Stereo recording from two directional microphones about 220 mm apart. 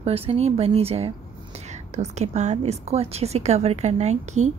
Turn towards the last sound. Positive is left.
turn(degrees=-30)  # may be behind; listen again after turning